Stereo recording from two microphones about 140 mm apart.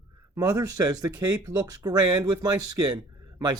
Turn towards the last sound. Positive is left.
turn(degrees=-25)  # may be behind; listen again after turning